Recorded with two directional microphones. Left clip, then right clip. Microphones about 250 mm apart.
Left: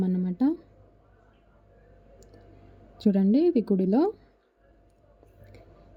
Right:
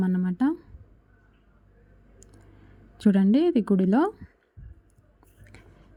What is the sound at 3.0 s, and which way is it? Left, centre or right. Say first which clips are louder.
A woman's voice: right 1 dB; centre.